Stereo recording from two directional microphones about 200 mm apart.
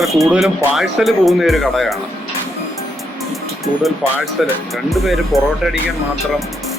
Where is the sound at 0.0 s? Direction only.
Centre (ahead or behind).